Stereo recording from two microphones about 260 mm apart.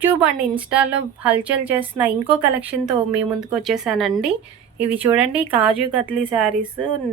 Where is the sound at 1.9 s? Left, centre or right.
Centre.